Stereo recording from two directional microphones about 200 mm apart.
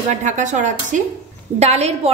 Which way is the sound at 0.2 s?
40° right (ahead or behind).